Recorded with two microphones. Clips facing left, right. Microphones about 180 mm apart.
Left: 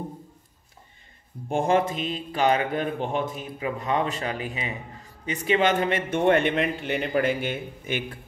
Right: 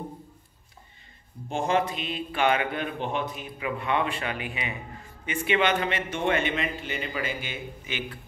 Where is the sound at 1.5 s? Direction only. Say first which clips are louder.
Left 3 dB; 50° left (ahead or behind).